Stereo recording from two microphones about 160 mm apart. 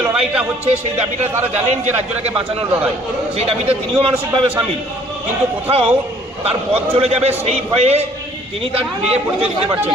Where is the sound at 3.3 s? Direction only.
40° right (ahead or behind).